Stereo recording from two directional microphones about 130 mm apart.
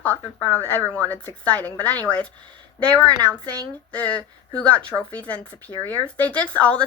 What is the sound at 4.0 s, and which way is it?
Speech, 10° left (ahead or behind).